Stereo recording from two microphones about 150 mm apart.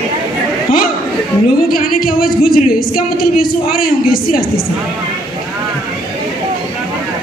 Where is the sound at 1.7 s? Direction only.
75° left (ahead or behind).